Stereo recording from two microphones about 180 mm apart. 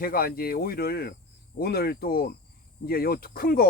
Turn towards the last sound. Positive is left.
turn(degrees=55)  # may be behind; listen again after turning